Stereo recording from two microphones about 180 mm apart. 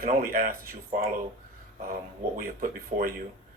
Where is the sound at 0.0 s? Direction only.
55° right (ahead or behind).